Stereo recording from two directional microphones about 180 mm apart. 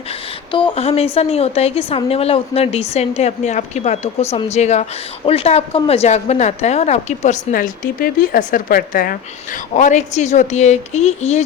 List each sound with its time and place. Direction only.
0.5 s a woman's voice: 30° left (ahead or behind); by 9.1 s 50° left (ahead or behind)
9.7 s a woman's voice: 40° left (ahead or behind)